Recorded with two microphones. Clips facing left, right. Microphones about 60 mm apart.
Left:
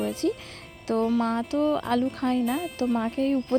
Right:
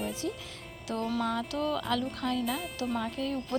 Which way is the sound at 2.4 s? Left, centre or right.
Centre.